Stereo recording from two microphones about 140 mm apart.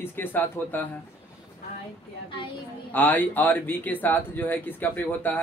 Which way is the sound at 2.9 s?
15° left (ahead or behind).